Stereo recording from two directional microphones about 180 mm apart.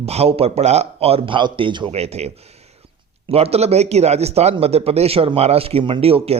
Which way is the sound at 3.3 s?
35° right (ahead or behind).